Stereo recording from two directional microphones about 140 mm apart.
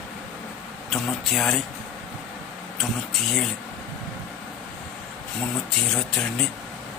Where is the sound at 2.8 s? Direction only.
Centre (ahead or behind).